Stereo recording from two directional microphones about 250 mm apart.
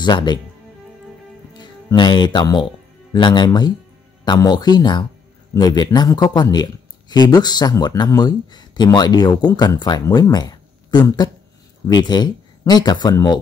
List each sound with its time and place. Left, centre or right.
0.0 s speech: centre
1.6 s speech: centre